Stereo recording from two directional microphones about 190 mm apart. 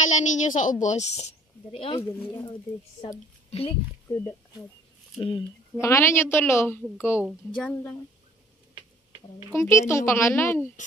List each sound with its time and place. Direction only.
0.0 s a woman's voice: 40° left (ahead or behind)
3.4 s speech: 30° left (ahead or behind)
4.1 s speech: 20° left (ahead or behind)
5.8 s a woman's voice: 15° left (ahead or behind)
7.2 s a woman's voice: centre (ahead or behind)
9.5 s a woman's voice: 15° left (ahead or behind)